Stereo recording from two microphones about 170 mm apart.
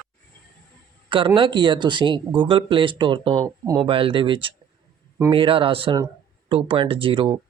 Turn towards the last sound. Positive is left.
turn(degrees=-30)  # may be behind; listen again after turning